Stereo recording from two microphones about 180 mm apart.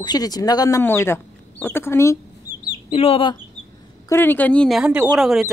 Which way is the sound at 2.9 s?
35° left (ahead or behind).